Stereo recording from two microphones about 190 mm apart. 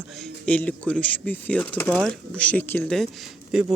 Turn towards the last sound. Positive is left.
turn(degrees=-5)  # may be behind; listen again after turning